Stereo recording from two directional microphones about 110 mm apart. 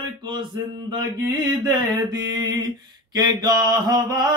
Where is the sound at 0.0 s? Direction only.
45° right (ahead or behind).